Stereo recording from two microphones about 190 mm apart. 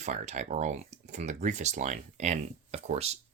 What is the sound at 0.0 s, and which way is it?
Speech, 40° right (ahead or behind).